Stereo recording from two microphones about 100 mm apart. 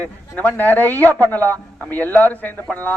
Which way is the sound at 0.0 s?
15° left (ahead or behind).